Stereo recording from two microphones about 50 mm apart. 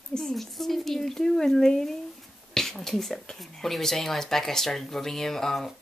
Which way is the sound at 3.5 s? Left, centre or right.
Centre.